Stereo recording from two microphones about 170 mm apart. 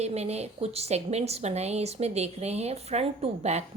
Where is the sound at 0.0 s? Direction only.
40° right (ahead or behind).